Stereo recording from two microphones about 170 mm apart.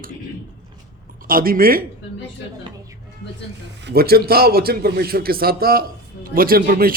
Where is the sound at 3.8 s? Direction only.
75° right (ahead or behind).